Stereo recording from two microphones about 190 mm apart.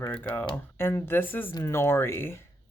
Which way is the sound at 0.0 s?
10° left (ahead or behind).